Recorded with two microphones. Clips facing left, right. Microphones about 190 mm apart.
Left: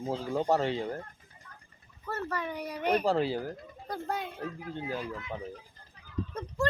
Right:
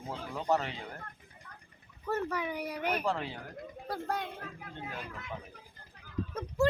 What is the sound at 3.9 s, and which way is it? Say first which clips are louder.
Speech: left 1 dB; centre (ahead or behind).